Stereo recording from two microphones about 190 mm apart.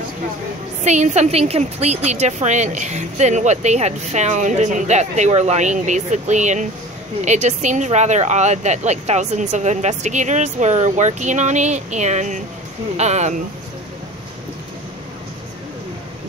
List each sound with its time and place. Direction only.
0.8 s a woman's voice: 40° right (ahead or behind)